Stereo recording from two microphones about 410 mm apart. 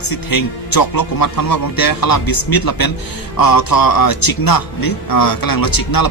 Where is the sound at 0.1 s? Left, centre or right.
Left.